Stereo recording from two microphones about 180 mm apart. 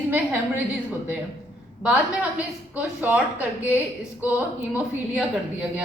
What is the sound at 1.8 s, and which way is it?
A woman's voice, 5° right (ahead or behind).